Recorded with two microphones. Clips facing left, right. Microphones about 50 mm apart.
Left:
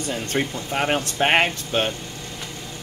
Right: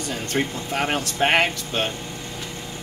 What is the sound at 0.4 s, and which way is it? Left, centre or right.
Speech, centre.